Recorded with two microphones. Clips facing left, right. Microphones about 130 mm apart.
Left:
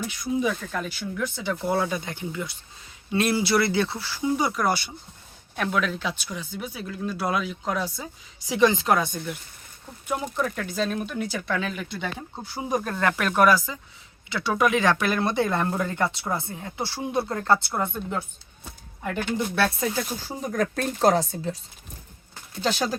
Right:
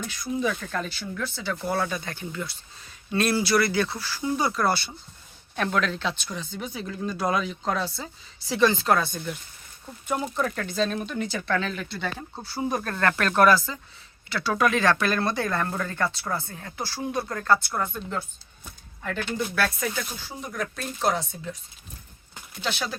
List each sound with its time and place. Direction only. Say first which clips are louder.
0.0 s speech: left 2 dB; 10° left (ahead or behind)
9.1 s speech: left 1 dB; centre (ahead or behind); by 18.0 s 20° left (ahead or behind)
19.0 s speech: left 2 dB; 15° left (ahead or behind)
19.5 s speech: left 3 dB; 25° left (ahead or behind)
22.6 s speech: left 5 dB; 40° left (ahead or behind)